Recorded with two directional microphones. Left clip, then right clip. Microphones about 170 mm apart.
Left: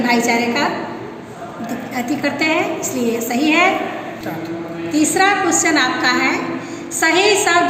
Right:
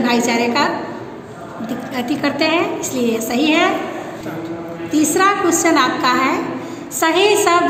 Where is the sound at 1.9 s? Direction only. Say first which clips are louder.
Right 1 dB; 35° right (ahead or behind).